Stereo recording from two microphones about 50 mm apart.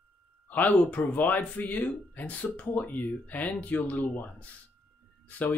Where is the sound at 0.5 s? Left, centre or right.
Left.